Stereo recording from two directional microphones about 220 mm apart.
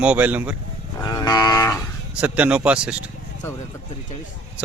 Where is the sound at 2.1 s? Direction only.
5° right (ahead or behind).